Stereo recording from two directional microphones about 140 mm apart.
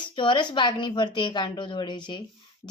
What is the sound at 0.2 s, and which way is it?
A woman's voice, 35° left (ahead or behind).